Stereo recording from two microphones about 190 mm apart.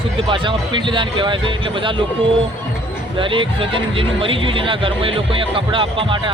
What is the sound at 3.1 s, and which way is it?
Speech, 25° right (ahead or behind).